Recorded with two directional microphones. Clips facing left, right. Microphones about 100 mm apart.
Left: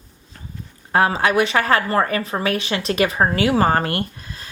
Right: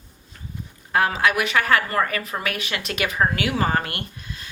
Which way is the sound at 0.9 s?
35° left (ahead or behind).